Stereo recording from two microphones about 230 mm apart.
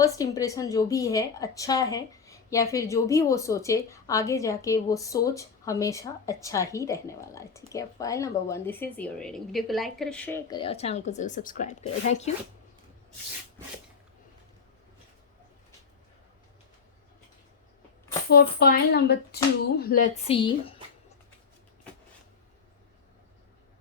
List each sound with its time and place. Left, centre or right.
0.0 s a woman's voice: centre
10.6 s speech: left
18.3 s speech: left
20.2 s speech: left